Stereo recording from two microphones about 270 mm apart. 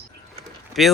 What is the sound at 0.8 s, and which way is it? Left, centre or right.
Speech, centre.